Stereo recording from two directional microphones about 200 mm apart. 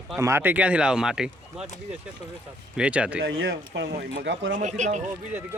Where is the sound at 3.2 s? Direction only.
60° right (ahead or behind).